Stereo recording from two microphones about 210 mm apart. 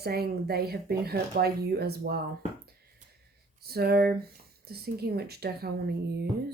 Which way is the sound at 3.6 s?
50° right (ahead or behind).